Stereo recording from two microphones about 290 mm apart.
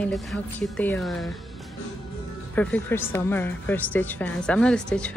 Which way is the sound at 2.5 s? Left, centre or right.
Centre.